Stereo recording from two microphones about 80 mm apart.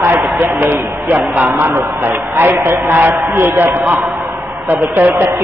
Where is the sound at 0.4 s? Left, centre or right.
Right.